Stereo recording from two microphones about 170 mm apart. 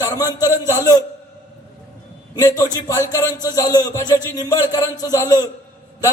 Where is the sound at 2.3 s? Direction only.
20° left (ahead or behind).